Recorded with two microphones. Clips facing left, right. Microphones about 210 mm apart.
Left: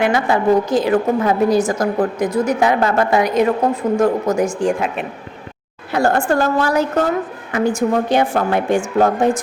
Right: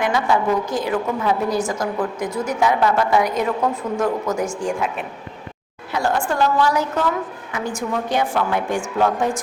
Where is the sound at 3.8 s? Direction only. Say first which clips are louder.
Left 6 dB; 30° left (ahead or behind).